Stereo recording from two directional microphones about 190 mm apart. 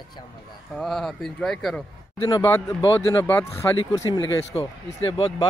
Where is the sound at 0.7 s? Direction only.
Centre (ahead or behind).